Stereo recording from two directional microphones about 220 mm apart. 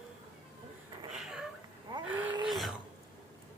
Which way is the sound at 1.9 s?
20° right (ahead or behind).